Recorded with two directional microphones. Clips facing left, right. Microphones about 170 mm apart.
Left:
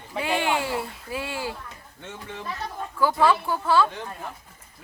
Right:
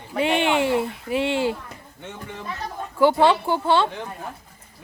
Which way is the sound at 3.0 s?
25° right (ahead or behind).